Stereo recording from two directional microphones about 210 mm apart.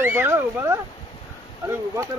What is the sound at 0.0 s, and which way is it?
Speech, 10° right (ahead or behind).